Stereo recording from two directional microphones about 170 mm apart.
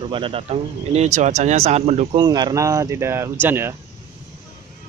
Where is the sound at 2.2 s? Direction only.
25° right (ahead or behind).